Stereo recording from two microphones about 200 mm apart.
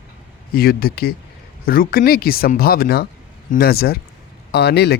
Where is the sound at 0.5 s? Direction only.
50° left (ahead or behind).